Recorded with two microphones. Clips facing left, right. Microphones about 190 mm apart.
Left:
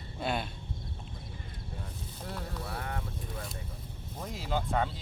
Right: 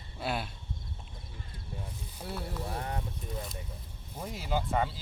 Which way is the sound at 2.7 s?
20° right (ahead or behind).